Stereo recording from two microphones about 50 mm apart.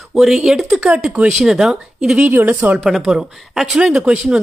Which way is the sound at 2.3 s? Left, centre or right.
Right.